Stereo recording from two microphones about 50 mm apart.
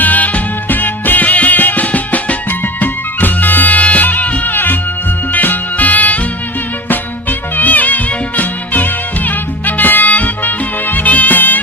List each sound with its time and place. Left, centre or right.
0.0 s music: left